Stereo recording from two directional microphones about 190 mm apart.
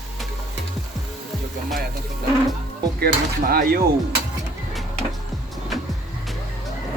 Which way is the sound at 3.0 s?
55° right (ahead or behind).